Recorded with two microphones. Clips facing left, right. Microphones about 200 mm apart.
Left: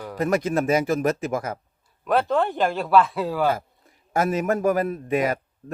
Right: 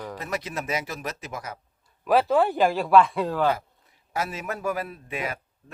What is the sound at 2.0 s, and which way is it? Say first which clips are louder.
A man's voice: right 1 dB; centre (ahead or behind).